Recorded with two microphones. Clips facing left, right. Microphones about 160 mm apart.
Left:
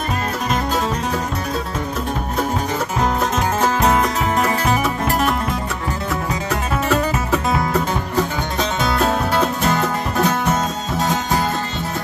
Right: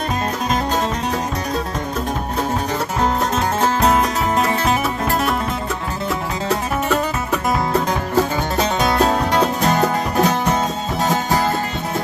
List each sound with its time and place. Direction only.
8.9 s music: 35° right (ahead or behind)